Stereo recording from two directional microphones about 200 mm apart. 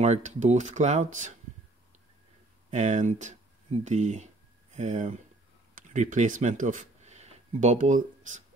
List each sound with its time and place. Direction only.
0.0 s speech: 35° right (ahead or behind)
2.7 s speech: 35° right (ahead or behind)